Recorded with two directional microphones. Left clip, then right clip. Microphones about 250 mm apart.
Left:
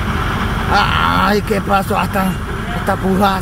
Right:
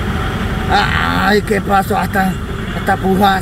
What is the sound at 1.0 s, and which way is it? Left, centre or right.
Speech, centre.